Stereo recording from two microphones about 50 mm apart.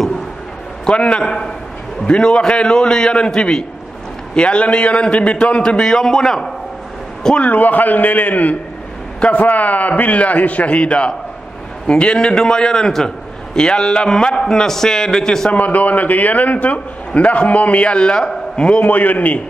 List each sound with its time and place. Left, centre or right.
0.8 s a man's voice: left
5.8 s a man's voice: centre
7.4 s a man's voice: left; by 15.5 s centre
15.5 s a man's voice: left
18.9 s a man's voice: left